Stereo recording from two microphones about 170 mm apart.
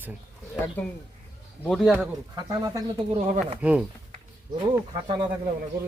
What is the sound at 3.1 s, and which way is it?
Speech, 45° right (ahead or behind).